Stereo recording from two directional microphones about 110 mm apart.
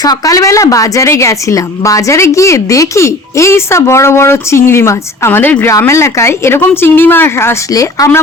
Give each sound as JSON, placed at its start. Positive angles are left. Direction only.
{"t": 0.0, "sound": "a woman's voice", "side_deg": 35}